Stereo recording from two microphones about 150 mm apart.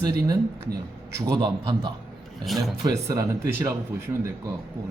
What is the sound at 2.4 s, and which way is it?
Speech, centre (ahead or behind).